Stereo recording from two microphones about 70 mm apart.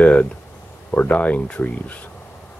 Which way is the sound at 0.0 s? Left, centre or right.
Centre.